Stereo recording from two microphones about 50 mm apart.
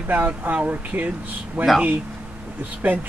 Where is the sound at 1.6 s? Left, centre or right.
Right.